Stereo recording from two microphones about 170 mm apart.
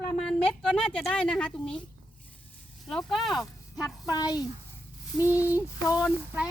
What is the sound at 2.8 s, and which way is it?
Speech, centre (ahead or behind).